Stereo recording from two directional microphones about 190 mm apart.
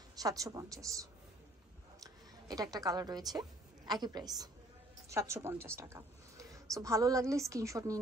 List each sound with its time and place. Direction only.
0.1 s a woman's voice: 20° right (ahead or behind)
2.0 s a woman's voice: 20° right (ahead or behind)